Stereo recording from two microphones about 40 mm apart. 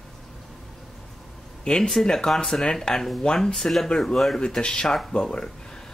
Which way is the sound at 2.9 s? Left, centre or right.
Left.